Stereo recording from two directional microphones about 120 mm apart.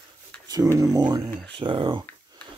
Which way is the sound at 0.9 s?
30° right (ahead or behind).